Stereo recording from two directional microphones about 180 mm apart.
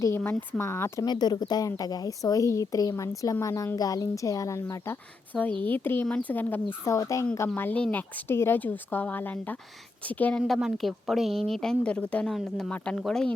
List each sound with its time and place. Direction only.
0.0 s a woman's voice: 15° left (ahead or behind)